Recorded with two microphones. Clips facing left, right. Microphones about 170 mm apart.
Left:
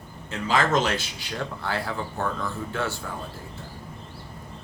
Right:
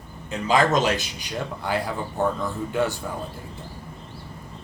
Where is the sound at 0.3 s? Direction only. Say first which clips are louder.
Right 3 dB; 15° right (ahead or behind).